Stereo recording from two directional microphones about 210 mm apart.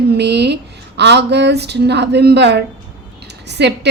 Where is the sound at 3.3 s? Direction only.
55° right (ahead or behind).